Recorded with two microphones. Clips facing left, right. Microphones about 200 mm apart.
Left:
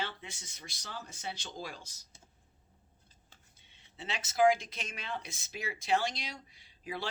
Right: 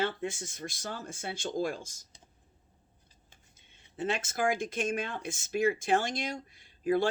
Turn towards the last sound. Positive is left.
turn(degrees=-50)  # may be behind; listen again after turning